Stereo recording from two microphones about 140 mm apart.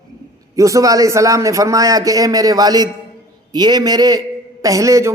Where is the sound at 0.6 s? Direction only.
25° right (ahead or behind).